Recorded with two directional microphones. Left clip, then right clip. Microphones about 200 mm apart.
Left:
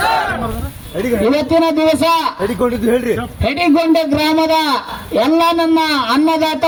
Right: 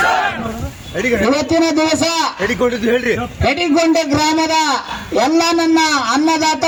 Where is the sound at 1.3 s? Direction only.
60° left (ahead or behind).